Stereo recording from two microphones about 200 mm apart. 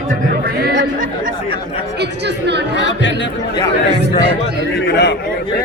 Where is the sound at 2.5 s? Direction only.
60° right (ahead or behind).